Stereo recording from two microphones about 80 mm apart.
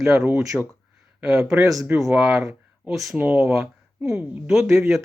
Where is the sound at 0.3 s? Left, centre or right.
Right.